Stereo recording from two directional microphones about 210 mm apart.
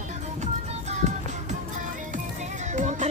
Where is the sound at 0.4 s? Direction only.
35° right (ahead or behind).